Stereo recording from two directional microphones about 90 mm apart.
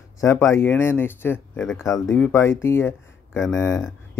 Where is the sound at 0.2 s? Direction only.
30° left (ahead or behind).